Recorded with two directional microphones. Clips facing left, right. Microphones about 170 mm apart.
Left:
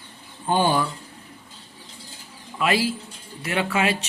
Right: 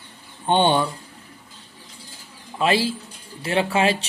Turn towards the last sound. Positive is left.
turn(degrees=-30)  # may be behind; listen again after turning